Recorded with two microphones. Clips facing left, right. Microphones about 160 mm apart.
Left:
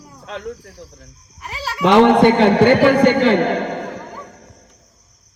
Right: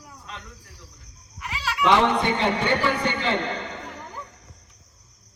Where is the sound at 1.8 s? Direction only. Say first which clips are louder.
Left 9 dB; 80° left.